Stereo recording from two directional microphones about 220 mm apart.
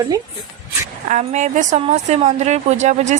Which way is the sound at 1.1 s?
35° right (ahead or behind).